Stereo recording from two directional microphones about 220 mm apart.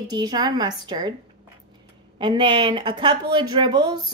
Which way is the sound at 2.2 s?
20° right (ahead or behind).